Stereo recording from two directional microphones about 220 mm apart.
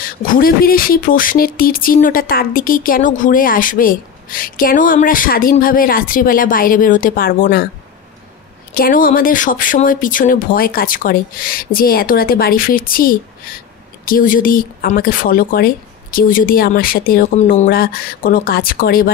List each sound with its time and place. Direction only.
0.4 s speech: 40° left (ahead or behind)
8.7 s speech: 40° left (ahead or behind)